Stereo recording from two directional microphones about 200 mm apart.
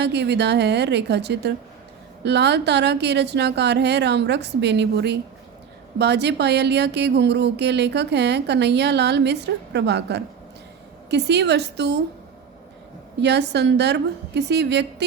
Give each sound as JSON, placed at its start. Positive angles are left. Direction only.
{"t": 0.0, "sound": "speech", "side_deg": -60}
{"t": 13.2, "sound": "speech", "side_deg": -60}